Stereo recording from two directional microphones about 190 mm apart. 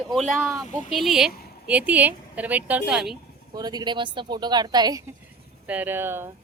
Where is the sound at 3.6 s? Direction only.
20° right (ahead or behind).